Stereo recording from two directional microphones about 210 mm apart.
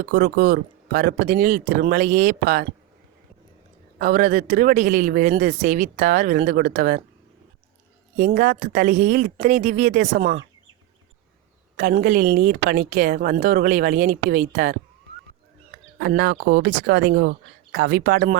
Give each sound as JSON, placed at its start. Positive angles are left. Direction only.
{"t": 0.0, "sound": "speech", "side_deg": -50}
{"t": 3.9, "sound": "a woman's voice", "side_deg": -40}
{"t": 8.1, "sound": "a woman's voice", "side_deg": -40}
{"t": 10.2, "sound": "speech", "side_deg": -55}
{"t": 11.8, "sound": "speech", "side_deg": -45}
{"t": 16.0, "sound": "speech", "side_deg": -50}